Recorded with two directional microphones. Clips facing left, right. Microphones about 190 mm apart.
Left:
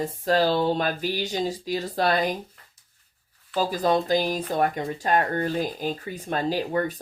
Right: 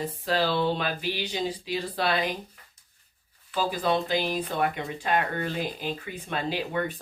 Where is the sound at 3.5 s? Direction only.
40° left (ahead or behind).